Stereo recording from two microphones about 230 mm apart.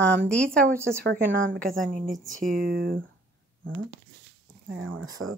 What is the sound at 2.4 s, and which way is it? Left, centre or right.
Speech, right.